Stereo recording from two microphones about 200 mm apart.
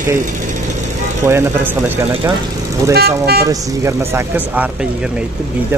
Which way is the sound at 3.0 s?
50° right (ahead or behind).